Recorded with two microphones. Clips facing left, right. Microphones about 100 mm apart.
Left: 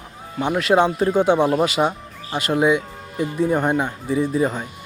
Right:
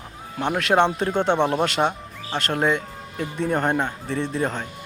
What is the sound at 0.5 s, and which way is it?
Speech, centre (ahead or behind).